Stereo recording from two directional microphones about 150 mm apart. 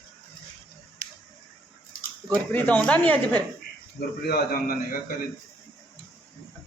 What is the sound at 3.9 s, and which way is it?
A man's voice, 90° left.